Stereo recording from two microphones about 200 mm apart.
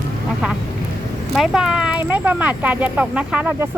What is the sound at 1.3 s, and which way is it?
Speech, 5° right (ahead or behind).